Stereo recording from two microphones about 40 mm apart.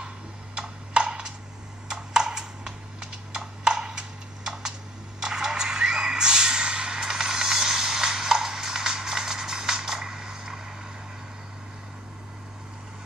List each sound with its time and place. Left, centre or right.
0.6 s typing: right
1.9 s computer keyboard: centre
5.2 s a sound: centre